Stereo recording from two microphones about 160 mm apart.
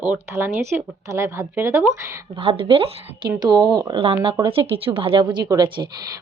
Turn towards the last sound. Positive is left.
turn(degrees=-25)  # may be behind; listen again after turning